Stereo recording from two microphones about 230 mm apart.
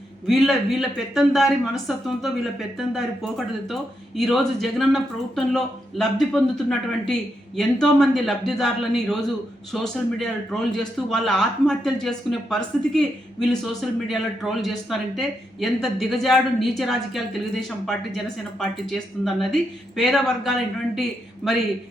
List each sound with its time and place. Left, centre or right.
0.3 s a man's voice: centre